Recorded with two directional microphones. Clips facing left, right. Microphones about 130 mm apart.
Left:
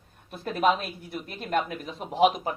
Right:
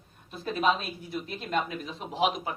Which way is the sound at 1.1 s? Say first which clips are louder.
Left 2 dB; 55° left (ahead or behind).